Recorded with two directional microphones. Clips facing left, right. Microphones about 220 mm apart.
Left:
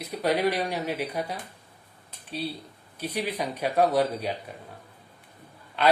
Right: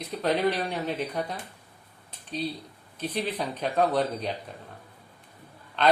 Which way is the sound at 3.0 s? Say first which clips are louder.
Even; 10° left (ahead or behind).